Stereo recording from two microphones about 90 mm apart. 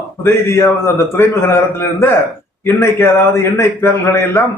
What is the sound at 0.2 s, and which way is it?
A man's voice, 30° left (ahead or behind).